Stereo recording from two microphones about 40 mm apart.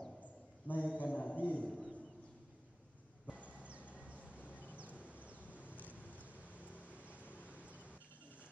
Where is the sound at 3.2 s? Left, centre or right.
Left.